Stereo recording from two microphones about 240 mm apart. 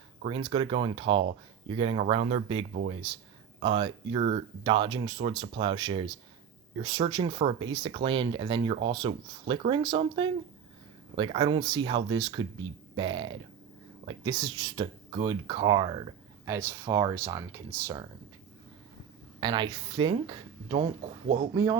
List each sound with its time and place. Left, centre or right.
0.3 s speech: centre
19.4 s speech: centre